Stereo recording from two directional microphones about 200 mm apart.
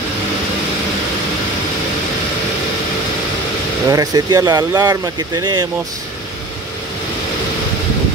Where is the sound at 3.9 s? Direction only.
20° right (ahead or behind).